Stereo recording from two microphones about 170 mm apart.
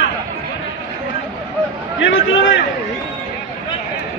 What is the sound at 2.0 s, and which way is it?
Speech, 90° left.